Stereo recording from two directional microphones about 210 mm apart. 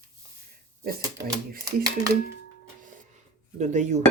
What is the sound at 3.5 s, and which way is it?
Speech, 35° right (ahead or behind).